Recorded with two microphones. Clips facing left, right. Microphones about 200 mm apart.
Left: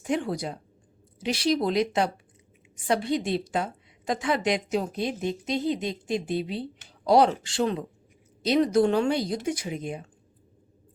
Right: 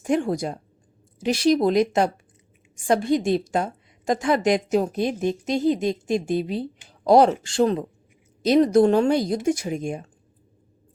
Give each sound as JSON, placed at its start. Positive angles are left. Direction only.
{"t": 0.0, "sound": "a woman's voice", "side_deg": -50}